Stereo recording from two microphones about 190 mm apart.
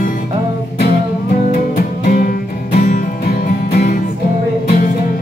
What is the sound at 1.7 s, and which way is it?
Music, 45° left (ahead or behind).